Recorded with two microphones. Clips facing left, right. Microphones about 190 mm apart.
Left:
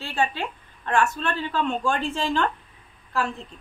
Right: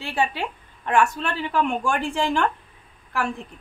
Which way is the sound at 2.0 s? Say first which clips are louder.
Right 2 dB; 20° left (ahead or behind).